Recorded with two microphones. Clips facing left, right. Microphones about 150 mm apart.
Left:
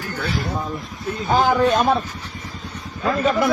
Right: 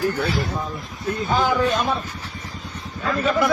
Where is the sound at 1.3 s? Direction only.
45° left (ahead or behind).